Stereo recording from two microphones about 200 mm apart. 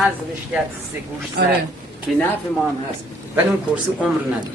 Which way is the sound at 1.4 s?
55° right (ahead or behind).